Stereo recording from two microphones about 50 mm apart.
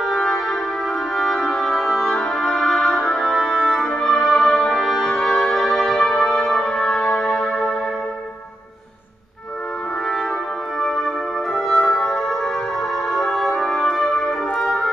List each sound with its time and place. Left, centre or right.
0.0 s music: centre
3.8 s music: centre
4.1 s music: centre
5.0 s music: centre
5.5 s music: centre
10.8 s music: centre
13.3 s brass instrument: centre